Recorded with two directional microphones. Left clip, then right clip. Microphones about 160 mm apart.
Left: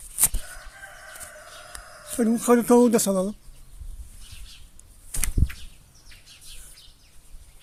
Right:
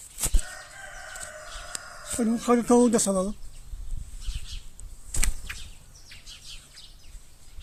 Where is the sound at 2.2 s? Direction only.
55° left (ahead or behind); by 3.3 s 35° left (ahead or behind).